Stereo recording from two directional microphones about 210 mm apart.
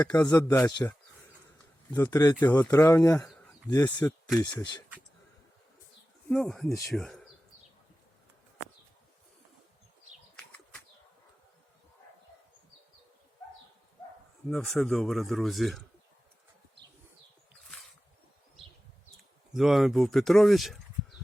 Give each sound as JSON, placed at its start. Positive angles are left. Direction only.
{"t": 0.2, "sound": "speech", "side_deg": 15}
{"t": 6.3, "sound": "speech", "side_deg": 0}
{"t": 14.5, "sound": "speech", "side_deg": 0}
{"t": 19.5, "sound": "speech", "side_deg": 0}